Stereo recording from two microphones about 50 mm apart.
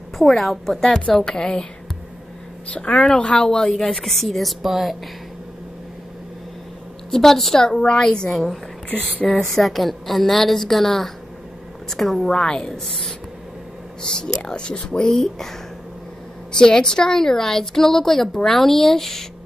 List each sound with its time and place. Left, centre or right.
0.2 s a woman's voice: centre
2.7 s a woman's voice: centre
7.1 s a woman's voice: centre
7.6 s a woman's voice: centre
8.3 s a woman's voice: centre
12.3 s a woman's voice: centre
16.5 s a woman's voice: centre